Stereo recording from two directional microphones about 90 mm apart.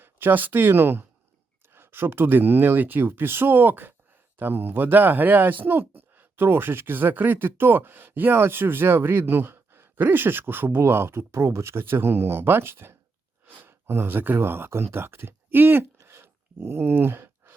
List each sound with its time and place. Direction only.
0.0 s speech: 20° right (ahead or behind)